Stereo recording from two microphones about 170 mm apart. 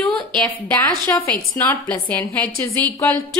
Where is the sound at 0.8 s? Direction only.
20° left (ahead or behind).